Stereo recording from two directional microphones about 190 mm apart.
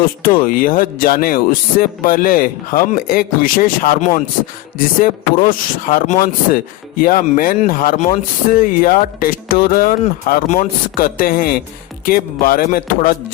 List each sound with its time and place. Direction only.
0.2 s speech: 50° left (ahead or behind)